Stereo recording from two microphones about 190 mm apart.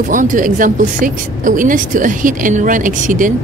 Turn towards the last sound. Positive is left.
turn(degrees=-45)  # may be behind; listen again after turning